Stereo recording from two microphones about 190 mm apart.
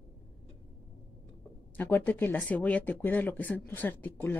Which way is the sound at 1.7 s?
10° left (ahead or behind).